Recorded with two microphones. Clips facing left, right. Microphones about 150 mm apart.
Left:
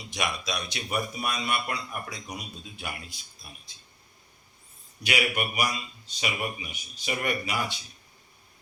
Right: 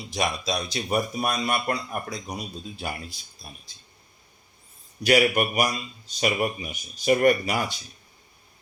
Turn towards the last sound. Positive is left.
turn(degrees=-45)  # may be behind; listen again after turning